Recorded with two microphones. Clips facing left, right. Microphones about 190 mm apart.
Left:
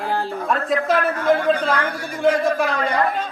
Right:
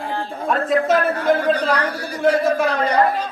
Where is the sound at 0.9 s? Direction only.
35° right (ahead or behind).